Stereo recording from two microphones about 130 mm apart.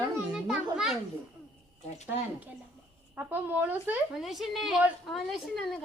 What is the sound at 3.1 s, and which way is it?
Speech, 15° right (ahead or behind).